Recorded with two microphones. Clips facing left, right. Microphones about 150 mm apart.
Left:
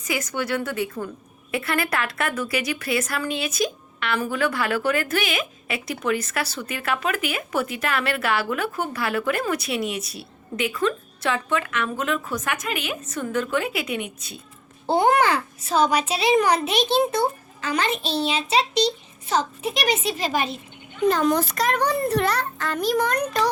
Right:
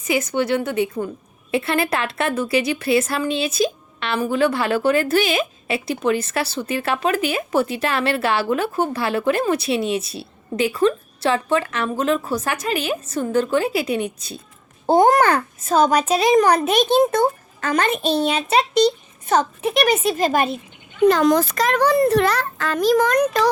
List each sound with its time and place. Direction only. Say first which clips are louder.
0.0 s a woman's voice: right 6 dB; 25° right (ahead or behind); by 20.6 s 50° right (ahead or behind)
21.1 s a child's voice: right 3 dB; 90° right